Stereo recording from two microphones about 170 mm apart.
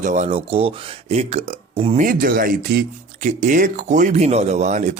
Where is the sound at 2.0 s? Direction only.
55° right (ahead or behind).